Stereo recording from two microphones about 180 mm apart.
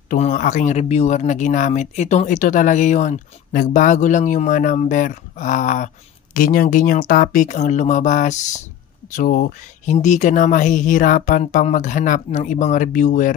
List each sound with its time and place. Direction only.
0.1 s speech: 45° left (ahead or behind)